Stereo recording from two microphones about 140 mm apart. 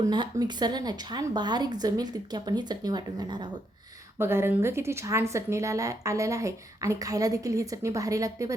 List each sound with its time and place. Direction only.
0.0 s a woman's voice: 30° right (ahead or behind)
4.2 s a woman's voice: 15° right (ahead or behind)